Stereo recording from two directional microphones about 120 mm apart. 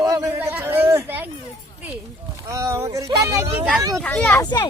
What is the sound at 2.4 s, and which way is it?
Speech, 25° right (ahead or behind).